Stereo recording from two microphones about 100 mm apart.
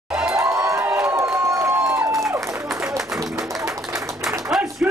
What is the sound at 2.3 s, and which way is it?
Applause, 30° right (ahead or behind).